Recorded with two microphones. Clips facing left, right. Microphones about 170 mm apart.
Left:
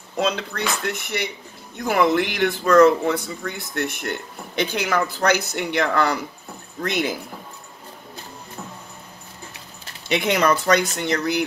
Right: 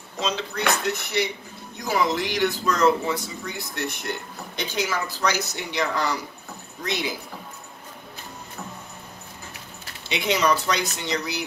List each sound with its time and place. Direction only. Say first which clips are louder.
0.2 s speech: left 3 dB; 60° left (ahead or behind)
10.1 s speech: left 3 dB; 55° left (ahead or behind)